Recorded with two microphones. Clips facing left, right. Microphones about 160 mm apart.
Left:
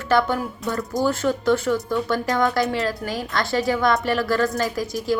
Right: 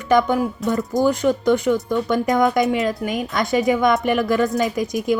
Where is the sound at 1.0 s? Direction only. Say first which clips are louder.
Right 3 dB; 15° right (ahead or behind).